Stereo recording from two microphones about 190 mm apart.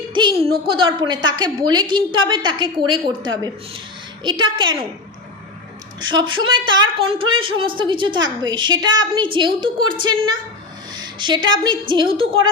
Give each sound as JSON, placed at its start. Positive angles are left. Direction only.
{"t": 0.7, "sound": "a woman's voice", "side_deg": -25}
{"t": 6.1, "sound": "a woman's voice", "side_deg": -25}
{"t": 10.9, "sound": "a sound", "side_deg": -25}
{"t": 11.4, "sound": "a woman's voice", "side_deg": -25}